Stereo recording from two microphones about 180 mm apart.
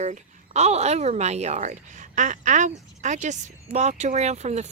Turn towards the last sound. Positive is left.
turn(degrees=-35)  # may be behind; listen again after turning